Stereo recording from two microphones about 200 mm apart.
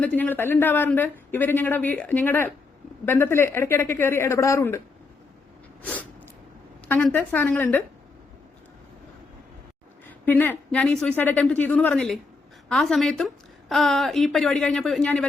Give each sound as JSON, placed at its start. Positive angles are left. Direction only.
{"t": 0.0, "sound": "speech", "side_deg": 10}
{"t": 5.8, "sound": "a sound", "side_deg": 5}
{"t": 6.8, "sound": "speech", "side_deg": 10}
{"t": 10.2, "sound": "a woman's voice", "side_deg": 10}